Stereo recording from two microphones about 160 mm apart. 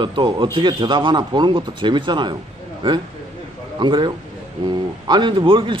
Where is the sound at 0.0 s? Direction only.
30° right (ahead or behind).